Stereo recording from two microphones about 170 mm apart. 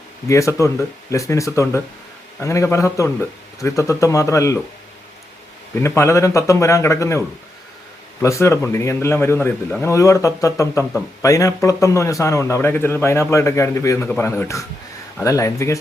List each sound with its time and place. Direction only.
0.3 s a man's voice: 20° left (ahead or behind)
5.7 s a man's voice: 15° left (ahead or behind)